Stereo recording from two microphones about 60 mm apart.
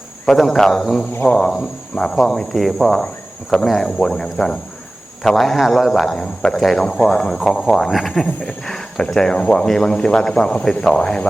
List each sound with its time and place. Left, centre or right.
0.3 s speech: centre